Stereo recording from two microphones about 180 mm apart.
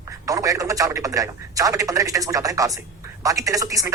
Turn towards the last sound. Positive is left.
turn(degrees=-20)  # may be behind; listen again after turning